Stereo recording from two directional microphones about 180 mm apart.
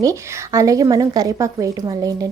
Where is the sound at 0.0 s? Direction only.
15° right (ahead or behind).